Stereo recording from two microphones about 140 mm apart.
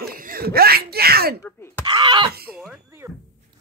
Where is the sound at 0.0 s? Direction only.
90° right.